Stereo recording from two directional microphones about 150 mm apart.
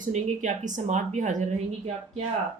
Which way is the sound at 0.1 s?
55° right (ahead or behind).